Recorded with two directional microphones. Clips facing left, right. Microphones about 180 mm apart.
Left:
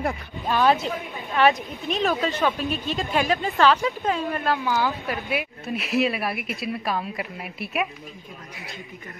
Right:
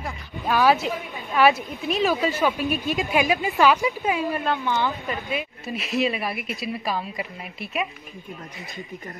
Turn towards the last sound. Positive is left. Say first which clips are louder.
# left 1 dB
turn(degrees=0)  # may be behind; listen again after turning